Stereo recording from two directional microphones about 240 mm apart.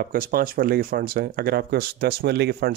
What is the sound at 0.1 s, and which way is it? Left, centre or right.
Speech, right.